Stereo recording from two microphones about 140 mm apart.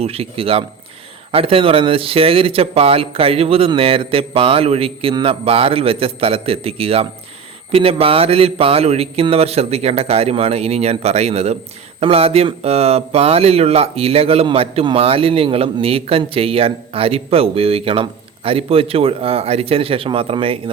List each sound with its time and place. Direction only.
0.0 s speech: 45° right (ahead or behind)